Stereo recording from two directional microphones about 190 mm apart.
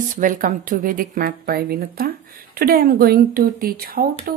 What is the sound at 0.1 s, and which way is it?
A woman's voice, 45° right (ahead or behind).